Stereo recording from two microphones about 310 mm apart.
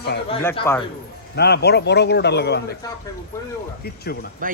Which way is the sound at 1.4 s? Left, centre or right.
Left.